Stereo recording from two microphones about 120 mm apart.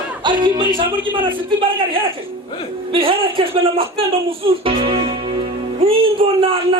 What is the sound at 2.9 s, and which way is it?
A man's voice, 50° right (ahead or behind).